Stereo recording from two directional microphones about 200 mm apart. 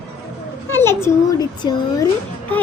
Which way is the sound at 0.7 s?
10° left (ahead or behind).